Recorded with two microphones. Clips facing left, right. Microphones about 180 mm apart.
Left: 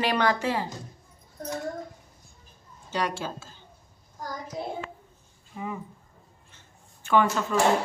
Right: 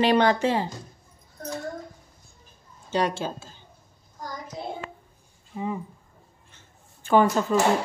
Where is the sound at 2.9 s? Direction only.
25° right (ahead or behind).